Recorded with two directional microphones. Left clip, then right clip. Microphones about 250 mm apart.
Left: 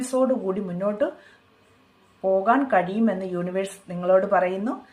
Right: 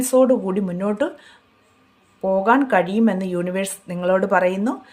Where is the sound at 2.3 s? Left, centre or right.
Right.